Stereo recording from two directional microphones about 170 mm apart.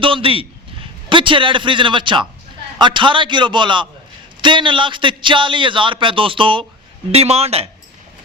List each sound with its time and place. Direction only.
0.0 s a man's voice: 30° right (ahead or behind)